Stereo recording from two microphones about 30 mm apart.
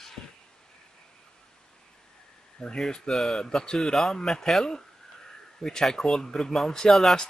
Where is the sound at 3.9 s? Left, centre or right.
Centre.